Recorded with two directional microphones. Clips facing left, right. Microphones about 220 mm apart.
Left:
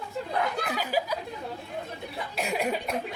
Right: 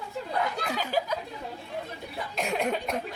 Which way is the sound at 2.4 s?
5° left (ahead or behind).